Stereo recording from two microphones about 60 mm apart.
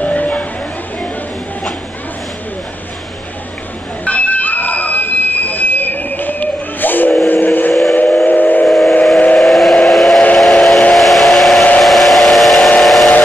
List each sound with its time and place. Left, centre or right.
0.0 s a sound: left
4.0 s a sound: left
7.2 s vehicle: left
7.9 s steam whistle: left
8.3 s train: left
8.6 s train: centre
9.4 s steam whistle: centre
11.8 s hair dryer: centre
12.8 s steam whistle: centre